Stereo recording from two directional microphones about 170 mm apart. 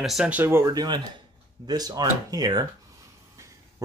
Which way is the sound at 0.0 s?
5° right (ahead or behind).